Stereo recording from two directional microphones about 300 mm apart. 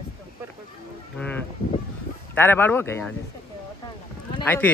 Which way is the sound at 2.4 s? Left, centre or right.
Centre.